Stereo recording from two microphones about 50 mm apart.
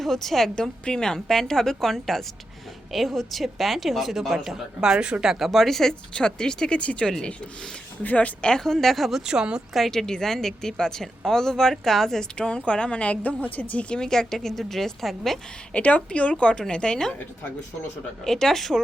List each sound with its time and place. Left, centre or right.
0.0 s a woman's voice: centre
4.9 s a woman's voice: centre
5.2 s speech: centre
5.5 s a woman's voice: centre; by 8.4 s left
8.4 s a woman's voice: centre
9.7 s a woman's voice: centre
12.4 s a woman's voice: left
13.9 s a woman's voice: centre
15.7 s a woman's voice: left
18.3 s a woman's voice: centre